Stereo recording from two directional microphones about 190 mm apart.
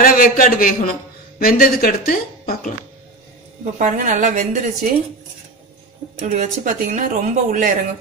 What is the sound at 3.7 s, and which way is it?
Speech, 40° right (ahead or behind).